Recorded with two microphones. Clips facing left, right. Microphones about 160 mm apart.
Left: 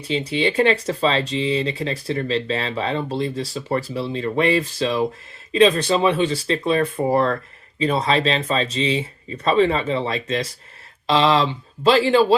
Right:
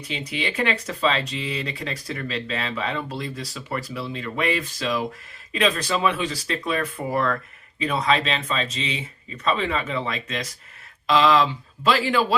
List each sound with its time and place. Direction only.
0.1 s speech: 30° left (ahead or behind)